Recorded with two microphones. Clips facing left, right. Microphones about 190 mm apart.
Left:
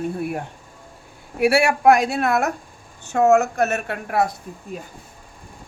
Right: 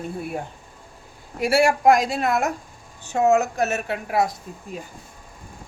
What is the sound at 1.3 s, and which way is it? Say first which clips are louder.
Speech: left 1 dB; 65° left (ahead or behind).